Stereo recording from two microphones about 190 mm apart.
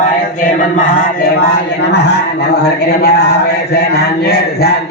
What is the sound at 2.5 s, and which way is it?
Speech, 60° left (ahead or behind).